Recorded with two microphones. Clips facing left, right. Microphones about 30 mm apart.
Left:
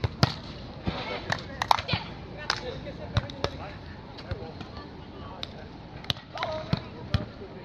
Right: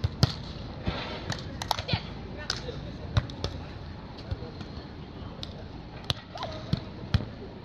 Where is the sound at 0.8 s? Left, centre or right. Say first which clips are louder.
Left 2 dB; centre.